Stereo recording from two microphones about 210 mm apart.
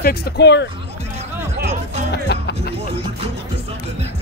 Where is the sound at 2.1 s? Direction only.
55° left (ahead or behind).